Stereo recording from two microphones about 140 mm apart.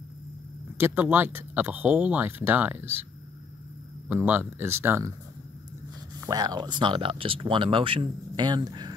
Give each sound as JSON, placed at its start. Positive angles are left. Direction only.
{"t": 0.7, "sound": "speech", "side_deg": -15}
{"t": 4.1, "sound": "speech", "side_deg": -15}
{"t": 6.2, "sound": "speech", "side_deg": -30}